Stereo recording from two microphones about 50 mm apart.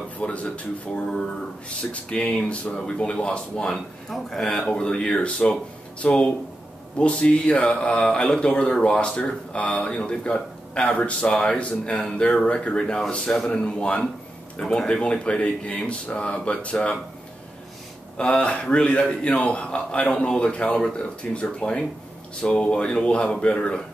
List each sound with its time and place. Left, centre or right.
0.2 s a man's voice: left
4.1 s speech: centre
4.7 s a man's voice: centre
18.1 s a man's voice: left